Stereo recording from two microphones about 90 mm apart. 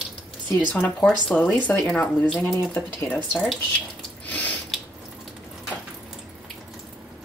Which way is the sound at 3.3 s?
Centre (ahead or behind).